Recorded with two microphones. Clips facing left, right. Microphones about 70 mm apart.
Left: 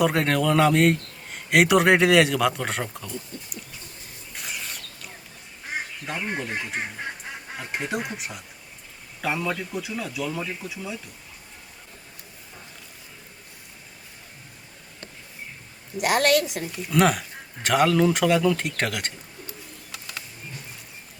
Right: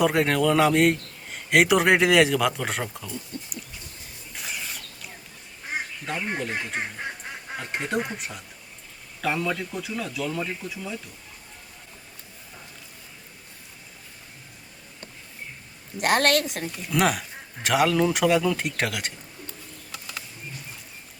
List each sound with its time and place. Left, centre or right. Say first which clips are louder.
0.0 s speech: right 1 dB; centre
4.4 s a sound: even; centre
6.1 s speech: right 1 dB; centre
16.0 s a woman's voice: left 1 dB; right
16.7 s speech: left 3 dB; centre
19.9 s a sound: even; centre